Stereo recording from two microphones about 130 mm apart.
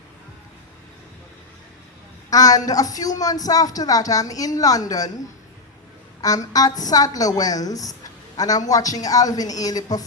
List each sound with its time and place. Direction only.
2.3 s a woman's voice: 30° left (ahead or behind)
6.2 s a woman's voice: 30° left (ahead or behind)